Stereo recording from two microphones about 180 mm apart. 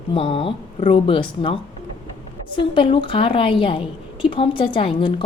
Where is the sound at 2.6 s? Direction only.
30° left (ahead or behind).